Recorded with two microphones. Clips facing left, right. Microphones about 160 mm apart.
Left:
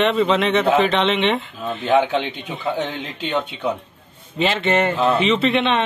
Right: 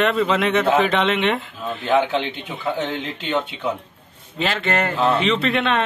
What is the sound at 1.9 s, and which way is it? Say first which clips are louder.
Speech: left 1 dB; 15° left (ahead or behind).